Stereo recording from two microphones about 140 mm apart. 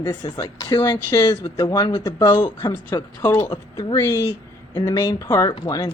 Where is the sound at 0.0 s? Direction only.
30° left (ahead or behind).